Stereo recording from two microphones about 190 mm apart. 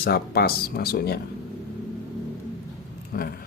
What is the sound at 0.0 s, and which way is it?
Speech, 55° left (ahead or behind).